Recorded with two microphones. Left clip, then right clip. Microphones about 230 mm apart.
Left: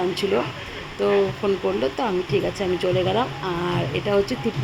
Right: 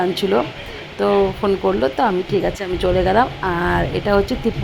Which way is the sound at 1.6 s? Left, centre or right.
Centre.